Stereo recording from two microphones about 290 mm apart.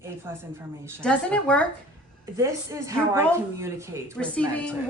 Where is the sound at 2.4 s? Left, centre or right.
Centre.